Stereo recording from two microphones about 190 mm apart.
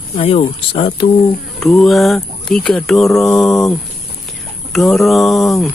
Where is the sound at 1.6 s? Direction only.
Centre (ahead or behind).